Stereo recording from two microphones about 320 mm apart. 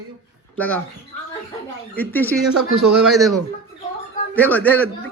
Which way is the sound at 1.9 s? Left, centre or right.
Centre.